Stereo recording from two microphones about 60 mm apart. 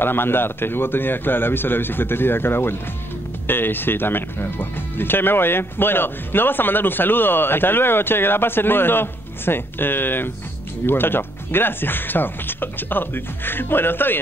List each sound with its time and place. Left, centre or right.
0.0 s speech: left